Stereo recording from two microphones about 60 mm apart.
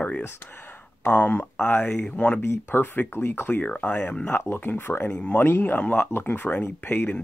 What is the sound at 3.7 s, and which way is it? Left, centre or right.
Speech, left.